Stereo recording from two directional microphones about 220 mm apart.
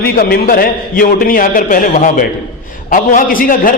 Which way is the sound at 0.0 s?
40° left (ahead or behind).